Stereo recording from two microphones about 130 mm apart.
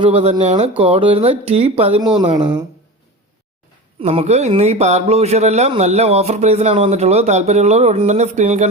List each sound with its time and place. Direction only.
0.0 s a man's voice: 50° right (ahead or behind)
0.8 s speech: 45° right (ahead or behind)
4.0 s a man's voice: 55° right (ahead or behind)